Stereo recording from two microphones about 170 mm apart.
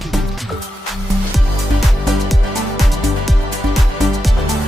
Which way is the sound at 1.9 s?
Centre (ahead or behind).